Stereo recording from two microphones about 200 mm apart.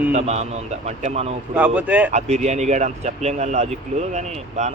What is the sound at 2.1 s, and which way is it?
Speech, 35° right (ahead or behind).